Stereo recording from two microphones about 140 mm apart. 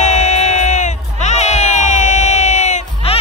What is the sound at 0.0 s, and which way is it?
Music, 55° left (ahead or behind).